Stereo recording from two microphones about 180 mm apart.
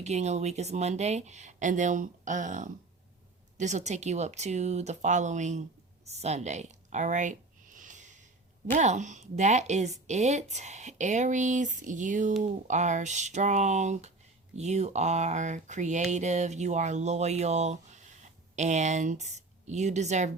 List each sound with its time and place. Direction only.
0.0 s speech: 40° right (ahead or behind)
6.1 s a sound: 40° right (ahead or behind)
8.7 s speech: 40° right (ahead or behind)